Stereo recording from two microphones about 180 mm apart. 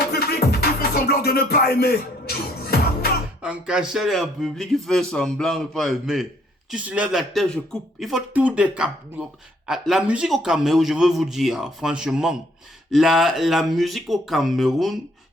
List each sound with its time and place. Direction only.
0.0 s music: 60° left (ahead or behind)
3.4 s a man's voice: 5° right (ahead or behind)